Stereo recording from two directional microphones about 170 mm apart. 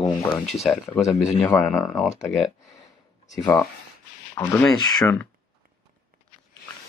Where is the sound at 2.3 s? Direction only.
Centre (ahead or behind).